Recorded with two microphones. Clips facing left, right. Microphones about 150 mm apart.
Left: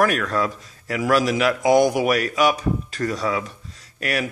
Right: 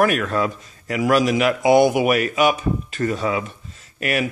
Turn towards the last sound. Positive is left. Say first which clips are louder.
# right 3 dB
turn(degrees=-5)  # may be behind; listen again after turning